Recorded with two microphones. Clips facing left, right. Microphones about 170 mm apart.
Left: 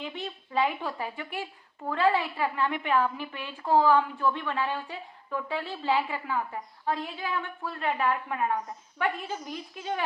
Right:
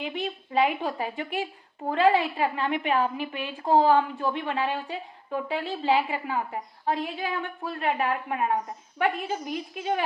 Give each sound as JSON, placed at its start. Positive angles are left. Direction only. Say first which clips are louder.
{"t": 0.0, "sound": "a woman's voice", "louder": "right 5 dB", "side_deg": -15}